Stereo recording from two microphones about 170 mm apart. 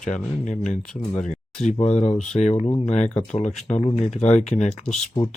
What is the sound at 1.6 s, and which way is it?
Speech, 40° left (ahead or behind).